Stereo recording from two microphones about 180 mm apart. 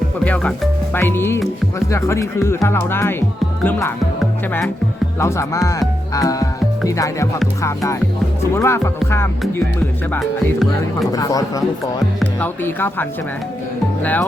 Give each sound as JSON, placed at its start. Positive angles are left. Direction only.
{"t": 0.3, "sound": "speech", "side_deg": 5}
{"t": 5.2, "sound": "speech", "side_deg": 15}
{"t": 6.1, "sound": "music", "side_deg": 20}
{"t": 7.6, "sound": "speech", "side_deg": 15}
{"t": 10.1, "sound": "speech", "side_deg": 0}
{"t": 11.1, "sound": "speech", "side_deg": 20}